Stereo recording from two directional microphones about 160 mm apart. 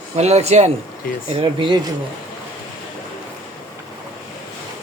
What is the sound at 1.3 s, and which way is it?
Speech, 35° right (ahead or behind).